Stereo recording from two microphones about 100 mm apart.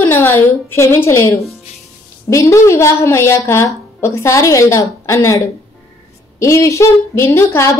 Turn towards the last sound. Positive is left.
turn(degrees=30)  # may be behind; listen again after turning